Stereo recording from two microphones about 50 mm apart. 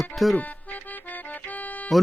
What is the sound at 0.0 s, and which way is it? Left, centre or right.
Speech, centre.